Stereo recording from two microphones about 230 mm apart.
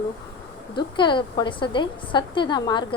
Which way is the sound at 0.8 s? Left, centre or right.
Centre.